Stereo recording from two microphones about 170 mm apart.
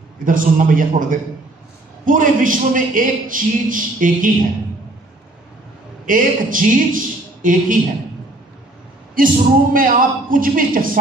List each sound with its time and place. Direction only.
0.2 s a man's voice: 55° right (ahead or behind)
6.0 s a man's voice: 55° right (ahead or behind)
9.1 s a man's voice: 55° right (ahead or behind)